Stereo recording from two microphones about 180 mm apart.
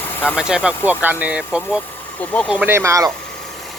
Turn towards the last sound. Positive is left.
turn(degrees=-20)  # may be behind; listen again after turning